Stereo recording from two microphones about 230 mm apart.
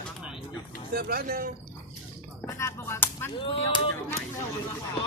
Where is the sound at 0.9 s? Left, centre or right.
Right.